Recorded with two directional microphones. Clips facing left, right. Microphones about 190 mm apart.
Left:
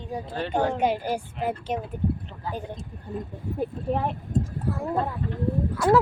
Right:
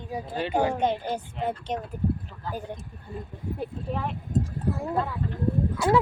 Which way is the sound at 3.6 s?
55° left (ahead or behind).